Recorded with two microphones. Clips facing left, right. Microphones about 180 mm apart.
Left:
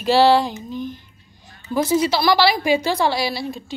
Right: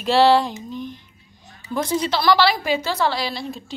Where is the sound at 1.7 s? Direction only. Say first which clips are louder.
Left 4 dB; 5° left (ahead or behind).